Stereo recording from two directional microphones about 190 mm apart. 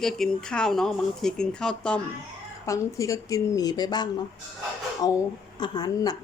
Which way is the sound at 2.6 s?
15° left (ahead or behind).